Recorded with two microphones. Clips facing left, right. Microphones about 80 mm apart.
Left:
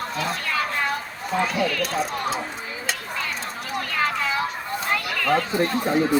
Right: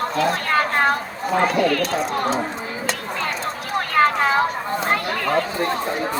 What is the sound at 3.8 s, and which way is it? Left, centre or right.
Clip-clop, right.